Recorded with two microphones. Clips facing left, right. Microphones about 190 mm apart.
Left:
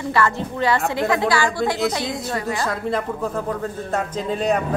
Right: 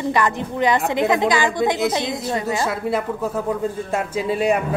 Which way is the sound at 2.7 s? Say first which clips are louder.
Right 1 dB; 5° right (ahead or behind).